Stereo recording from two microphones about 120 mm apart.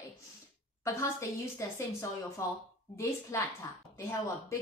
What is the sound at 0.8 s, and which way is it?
A woman's voice, 25° left (ahead or behind).